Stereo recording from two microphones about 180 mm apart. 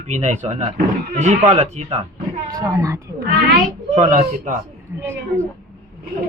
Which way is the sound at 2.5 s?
15° right (ahead or behind).